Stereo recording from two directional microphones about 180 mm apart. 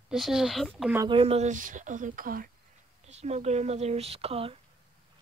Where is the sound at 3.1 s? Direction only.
40° right (ahead or behind).